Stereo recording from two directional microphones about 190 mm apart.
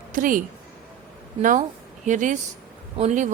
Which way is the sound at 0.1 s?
45° right (ahead or behind).